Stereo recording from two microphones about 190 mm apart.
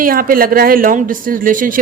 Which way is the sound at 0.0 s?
50° right (ahead or behind).